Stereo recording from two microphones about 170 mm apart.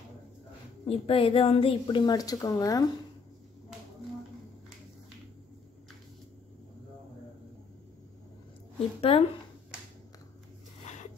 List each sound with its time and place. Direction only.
0.8 s a woman's voice: 35° left (ahead or behind)
8.7 s a woman's voice: 35° left (ahead or behind)